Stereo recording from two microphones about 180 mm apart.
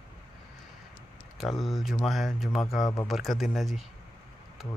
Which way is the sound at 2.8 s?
20° left (ahead or behind).